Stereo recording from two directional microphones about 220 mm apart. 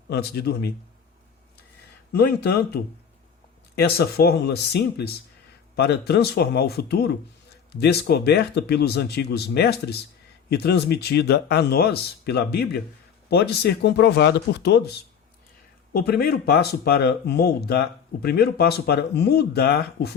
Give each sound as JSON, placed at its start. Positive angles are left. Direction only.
{"t": 0.1, "sound": "speech", "side_deg": 45}
{"t": 2.1, "sound": "speech", "side_deg": 45}